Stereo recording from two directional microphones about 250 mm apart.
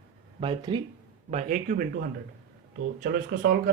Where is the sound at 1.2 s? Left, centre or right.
Right.